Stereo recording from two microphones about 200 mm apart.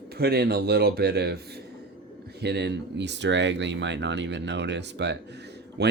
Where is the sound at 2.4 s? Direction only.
55° right (ahead or behind).